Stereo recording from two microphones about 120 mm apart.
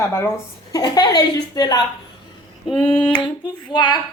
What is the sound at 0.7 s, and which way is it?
A woman's voice, 35° left (ahead or behind).